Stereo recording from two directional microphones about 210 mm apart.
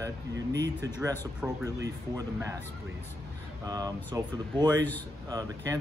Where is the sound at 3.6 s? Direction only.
20° right (ahead or behind).